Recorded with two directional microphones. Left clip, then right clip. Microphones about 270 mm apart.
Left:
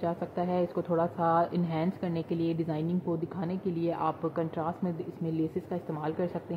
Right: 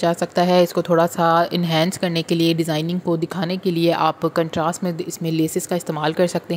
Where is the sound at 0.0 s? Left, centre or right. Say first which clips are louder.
Right 14 dB; right.